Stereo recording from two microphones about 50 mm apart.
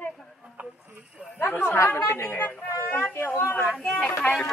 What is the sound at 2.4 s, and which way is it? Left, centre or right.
A woman's voice, left.